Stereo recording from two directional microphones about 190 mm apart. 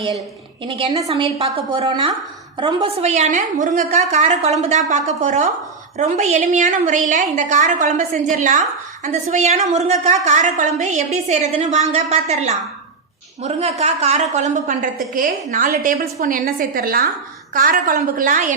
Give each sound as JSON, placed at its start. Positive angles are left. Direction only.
{"t": 0.6, "sound": "a woman's voice", "side_deg": -25}